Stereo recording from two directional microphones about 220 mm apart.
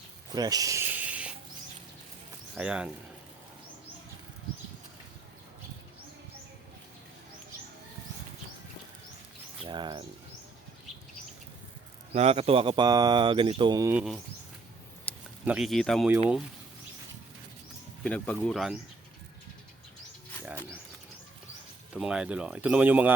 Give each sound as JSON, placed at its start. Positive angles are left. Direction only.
{"t": 0.3, "sound": "snake", "side_deg": -15}
{"t": 2.6, "sound": "speech", "side_deg": -5}
{"t": 9.6, "sound": "speech", "side_deg": -20}
{"t": 12.1, "sound": "speech", "side_deg": -25}
{"t": 15.1, "sound": "a sound", "side_deg": 5}
{"t": 15.4, "sound": "speech", "side_deg": 0}
{"t": 18.0, "sound": "speech", "side_deg": 5}
{"t": 21.9, "sound": "speech", "side_deg": -5}